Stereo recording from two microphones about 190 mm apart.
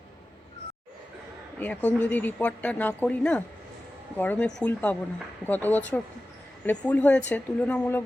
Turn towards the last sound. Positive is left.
turn(degrees=10)  # may be behind; listen again after turning